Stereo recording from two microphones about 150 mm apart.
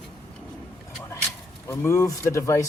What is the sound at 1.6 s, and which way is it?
Speech, 20° left (ahead or behind).